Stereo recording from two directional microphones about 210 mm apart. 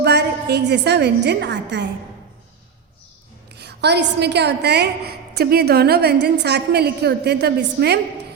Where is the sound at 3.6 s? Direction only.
50° right (ahead or behind).